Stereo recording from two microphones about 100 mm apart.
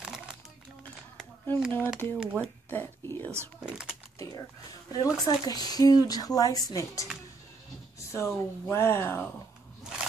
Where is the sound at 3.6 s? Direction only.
10° right (ahead or behind).